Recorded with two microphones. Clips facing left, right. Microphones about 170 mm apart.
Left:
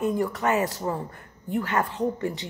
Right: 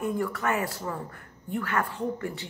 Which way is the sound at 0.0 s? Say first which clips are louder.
Left 4 dB; 20° left (ahead or behind).